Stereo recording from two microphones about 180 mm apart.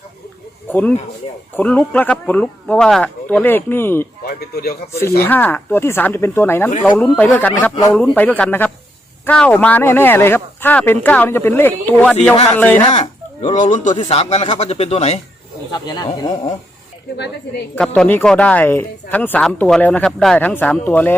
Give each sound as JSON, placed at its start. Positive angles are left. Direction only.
{"t": 0.7, "sound": "speech", "side_deg": 10}
{"t": 4.3, "sound": "a man's voice", "side_deg": 60}
{"t": 4.9, "sound": "speech", "side_deg": 15}
{"t": 12.9, "sound": "fowl", "side_deg": 40}
{"t": 13.6, "sound": "a man's voice", "side_deg": 45}
{"t": 13.9, "sound": "speech", "side_deg": 30}
{"t": 15.7, "sound": "speech", "side_deg": 25}
{"t": 17.7, "sound": "speech", "side_deg": 5}